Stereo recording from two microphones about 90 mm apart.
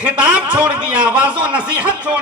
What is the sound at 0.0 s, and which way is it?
A man's voice, 15° right (ahead or behind).